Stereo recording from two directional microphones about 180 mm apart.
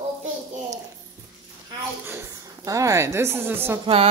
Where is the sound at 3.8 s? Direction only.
30° right (ahead or behind).